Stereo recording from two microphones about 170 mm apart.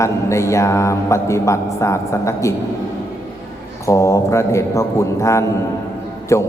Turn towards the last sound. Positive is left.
turn(degrees=15)  # may be behind; listen again after turning